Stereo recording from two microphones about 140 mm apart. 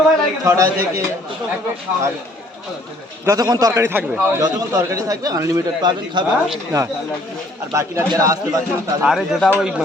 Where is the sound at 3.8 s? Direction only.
15° right (ahead or behind); by 6.3 s 35° right (ahead or behind).